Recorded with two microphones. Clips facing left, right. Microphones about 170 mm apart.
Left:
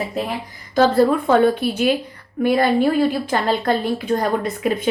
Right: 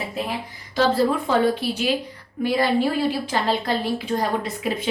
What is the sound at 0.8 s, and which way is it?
A woman's voice, 55° left (ahead or behind).